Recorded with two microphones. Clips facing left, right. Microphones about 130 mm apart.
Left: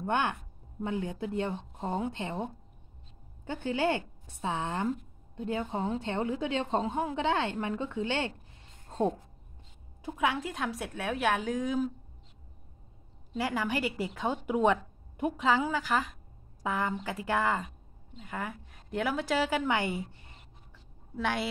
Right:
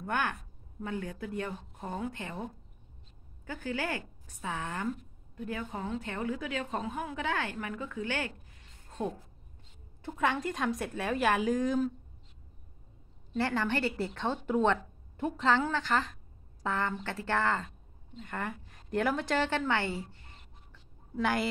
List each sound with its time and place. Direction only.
0.0 s a woman's voice: 25° left (ahead or behind)
10.0 s a woman's voice: 5° left (ahead or behind)
13.3 s a woman's voice: 10° left (ahead or behind)
21.2 s a woman's voice: centre (ahead or behind)